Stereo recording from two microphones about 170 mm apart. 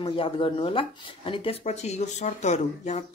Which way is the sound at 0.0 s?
30° left (ahead or behind).